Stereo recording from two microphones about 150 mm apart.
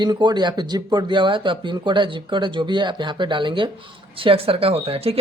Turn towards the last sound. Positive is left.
turn(degrees=-40)  # may be behind; listen again after turning